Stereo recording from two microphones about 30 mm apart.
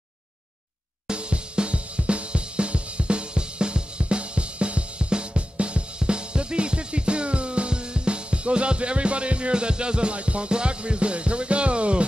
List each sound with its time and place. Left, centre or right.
1.0 s hi-hat: right
5.1 s drum kit: right